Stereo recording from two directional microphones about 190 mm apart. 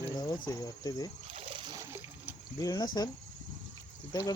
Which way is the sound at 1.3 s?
30° right (ahead or behind).